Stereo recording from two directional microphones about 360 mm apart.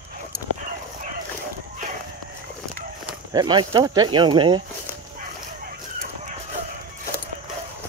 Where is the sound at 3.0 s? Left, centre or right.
Centre.